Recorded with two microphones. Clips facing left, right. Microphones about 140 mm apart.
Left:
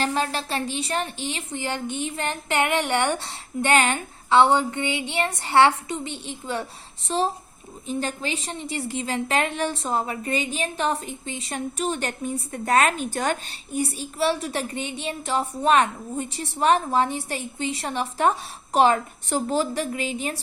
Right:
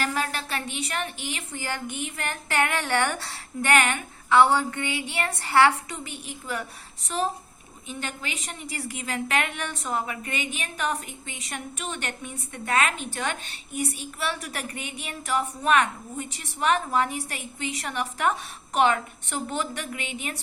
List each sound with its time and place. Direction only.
0.0 s a woman's voice: 30° left (ahead or behind)